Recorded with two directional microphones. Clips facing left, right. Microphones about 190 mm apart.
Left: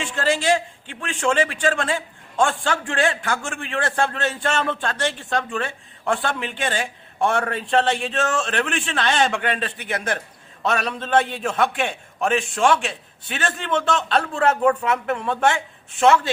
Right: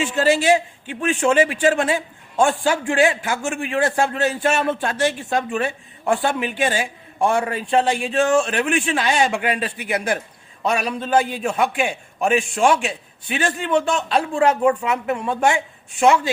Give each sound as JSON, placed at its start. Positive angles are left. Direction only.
{"t": 0.0, "sound": "a man's voice", "side_deg": -20}